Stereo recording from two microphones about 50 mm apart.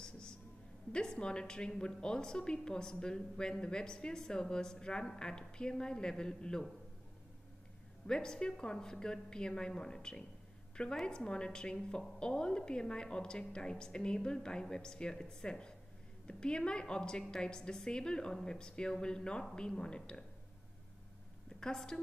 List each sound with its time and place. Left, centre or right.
0.0 s a sound: centre
0.9 s a woman's voice: centre
8.1 s a woman's voice: centre
21.5 s a woman's voice: centre